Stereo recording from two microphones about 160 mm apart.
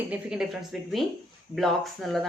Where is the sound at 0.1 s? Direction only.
5° right (ahead or behind).